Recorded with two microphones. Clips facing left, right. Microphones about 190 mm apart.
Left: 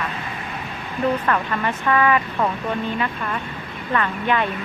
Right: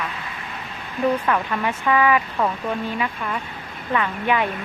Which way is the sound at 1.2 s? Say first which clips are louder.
Even; 10° right (ahead or behind).